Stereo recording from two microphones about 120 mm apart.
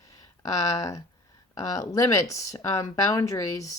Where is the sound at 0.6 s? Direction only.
25° left (ahead or behind).